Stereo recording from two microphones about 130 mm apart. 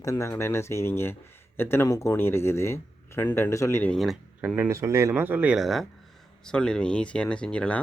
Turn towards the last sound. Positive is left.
turn(degrees=10)  # may be behind; listen again after turning